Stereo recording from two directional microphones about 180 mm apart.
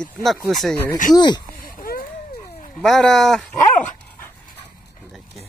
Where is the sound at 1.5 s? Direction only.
55° left (ahead or behind).